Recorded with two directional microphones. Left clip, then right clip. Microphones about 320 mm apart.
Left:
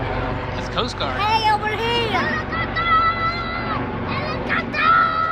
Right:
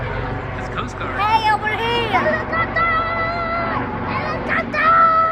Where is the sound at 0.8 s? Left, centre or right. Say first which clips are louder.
Even; centre.